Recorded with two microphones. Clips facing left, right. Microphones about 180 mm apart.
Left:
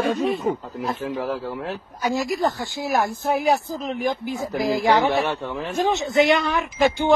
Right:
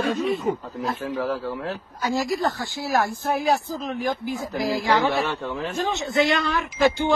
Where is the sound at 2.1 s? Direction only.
20° left (ahead or behind).